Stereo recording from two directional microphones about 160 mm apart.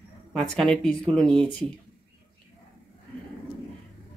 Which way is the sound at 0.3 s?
Centre (ahead or behind).